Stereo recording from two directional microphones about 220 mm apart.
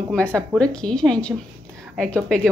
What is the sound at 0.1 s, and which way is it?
Speech, 5° left (ahead or behind).